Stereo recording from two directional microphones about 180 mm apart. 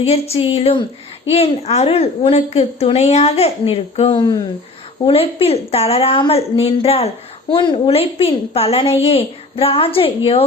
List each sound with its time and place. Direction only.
0.0 s a woman's voice: 35° left (ahead or behind)